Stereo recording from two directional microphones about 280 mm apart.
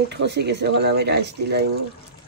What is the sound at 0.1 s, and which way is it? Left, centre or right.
Speech, right.